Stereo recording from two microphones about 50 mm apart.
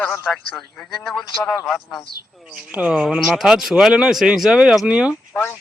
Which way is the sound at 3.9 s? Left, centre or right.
Centre.